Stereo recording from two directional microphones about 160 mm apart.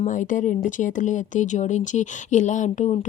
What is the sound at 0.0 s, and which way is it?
Speech, 55° left (ahead or behind).